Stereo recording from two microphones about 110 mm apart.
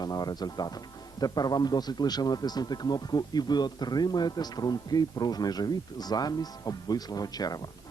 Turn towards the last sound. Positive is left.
turn(degrees=35)  # may be behind; listen again after turning